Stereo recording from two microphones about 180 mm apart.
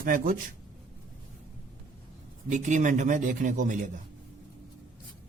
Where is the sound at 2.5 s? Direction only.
45° right (ahead or behind).